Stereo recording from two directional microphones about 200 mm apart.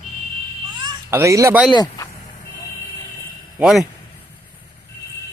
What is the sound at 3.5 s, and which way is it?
Speech, 5° right (ahead or behind).